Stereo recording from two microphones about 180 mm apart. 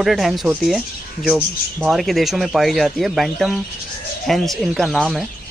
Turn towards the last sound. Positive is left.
turn(degrees=0)  # may be behind; listen again after turning